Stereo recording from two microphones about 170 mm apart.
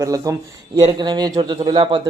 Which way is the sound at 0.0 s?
20° right (ahead or behind).